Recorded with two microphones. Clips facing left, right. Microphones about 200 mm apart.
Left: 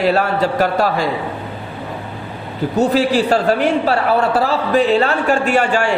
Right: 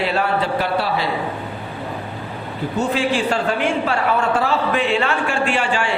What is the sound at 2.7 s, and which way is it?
A man's voice, 40° left (ahead or behind).